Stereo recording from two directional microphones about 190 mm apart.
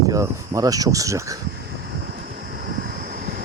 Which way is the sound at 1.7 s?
55° right (ahead or behind).